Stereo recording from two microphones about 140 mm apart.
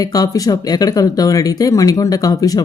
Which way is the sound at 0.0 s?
25° left (ahead or behind).